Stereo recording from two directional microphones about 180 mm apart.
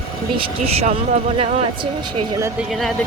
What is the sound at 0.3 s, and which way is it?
Speech, 35° right (ahead or behind).